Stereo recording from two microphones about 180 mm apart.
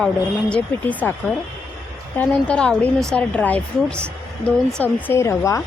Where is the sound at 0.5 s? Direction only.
10° left (ahead or behind).